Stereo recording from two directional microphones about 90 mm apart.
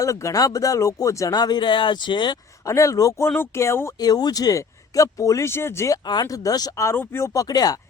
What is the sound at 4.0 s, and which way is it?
Speech, 45° left (ahead or behind).